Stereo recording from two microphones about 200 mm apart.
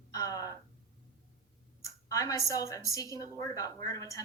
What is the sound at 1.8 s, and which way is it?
A woman's voice, 15° left (ahead or behind).